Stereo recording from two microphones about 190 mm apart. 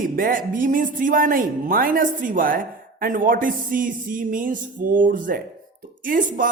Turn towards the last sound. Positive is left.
turn(degrees=-45)  # may be behind; listen again after turning